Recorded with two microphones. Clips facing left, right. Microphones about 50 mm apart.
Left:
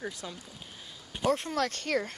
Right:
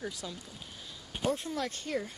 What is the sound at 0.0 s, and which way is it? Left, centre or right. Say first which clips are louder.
Speech: left 1 dB; left.